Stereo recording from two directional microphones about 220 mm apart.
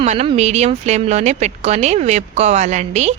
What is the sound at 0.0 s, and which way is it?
A woman's voice, 30° right (ahead or behind).